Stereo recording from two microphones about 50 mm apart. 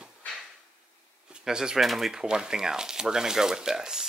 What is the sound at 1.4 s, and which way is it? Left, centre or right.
Speech, centre.